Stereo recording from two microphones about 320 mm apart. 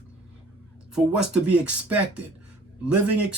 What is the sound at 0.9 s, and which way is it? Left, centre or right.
Speech, centre.